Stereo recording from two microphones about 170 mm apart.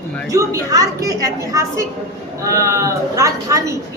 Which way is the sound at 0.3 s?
20° right (ahead or behind).